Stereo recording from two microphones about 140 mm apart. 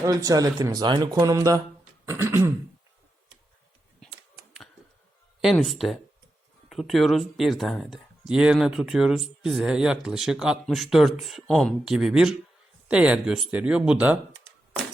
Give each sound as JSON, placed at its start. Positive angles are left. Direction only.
{"t": 0.0, "sound": "speech", "side_deg": -25}
{"t": 2.0, "sound": "throat clearing", "side_deg": -15}
{"t": 5.4, "sound": "speech", "side_deg": 0}